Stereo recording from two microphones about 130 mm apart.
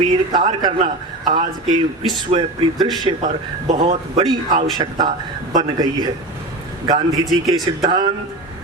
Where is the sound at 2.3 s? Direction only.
50° right (ahead or behind).